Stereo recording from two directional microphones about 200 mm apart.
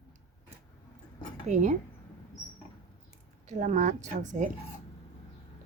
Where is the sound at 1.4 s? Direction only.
35° right (ahead or behind).